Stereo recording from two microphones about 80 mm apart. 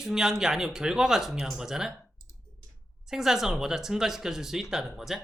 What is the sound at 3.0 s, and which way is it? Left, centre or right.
Speech, centre.